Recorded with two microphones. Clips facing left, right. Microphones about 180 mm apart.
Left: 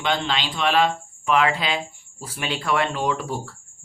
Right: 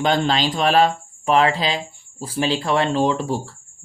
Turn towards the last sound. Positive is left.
turn(degrees=-30)  # may be behind; listen again after turning